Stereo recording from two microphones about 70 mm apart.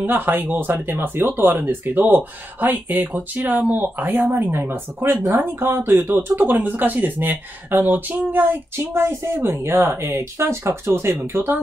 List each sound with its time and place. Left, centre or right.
0.0 s speech: right